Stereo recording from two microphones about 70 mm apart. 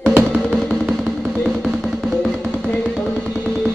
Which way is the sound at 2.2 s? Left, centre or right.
Centre.